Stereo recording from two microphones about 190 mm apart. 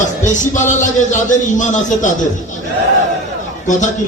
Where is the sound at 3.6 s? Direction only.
40° left (ahead or behind).